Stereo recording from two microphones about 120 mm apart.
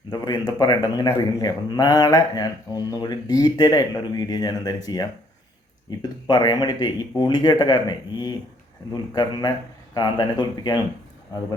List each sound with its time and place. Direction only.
0.1 s speech: 35° left (ahead or behind)